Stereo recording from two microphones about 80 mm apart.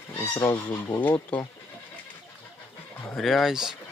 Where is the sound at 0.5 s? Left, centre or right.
Left.